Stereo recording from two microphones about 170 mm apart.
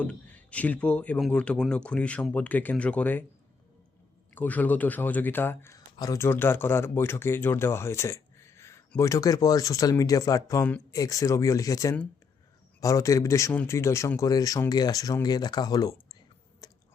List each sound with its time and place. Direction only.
0.0 s speech: 10° left (ahead or behind)
4.4 s speech: 10° left (ahead or behind)
16.6 s a sound: 20° left (ahead or behind)